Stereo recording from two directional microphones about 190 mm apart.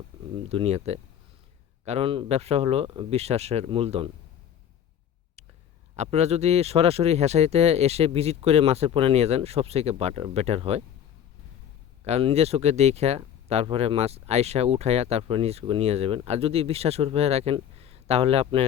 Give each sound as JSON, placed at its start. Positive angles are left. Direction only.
{"t": 0.4, "sound": "speech", "side_deg": -35}
{"t": 6.0, "sound": "speech", "side_deg": -35}
{"t": 12.0, "sound": "speech", "side_deg": -35}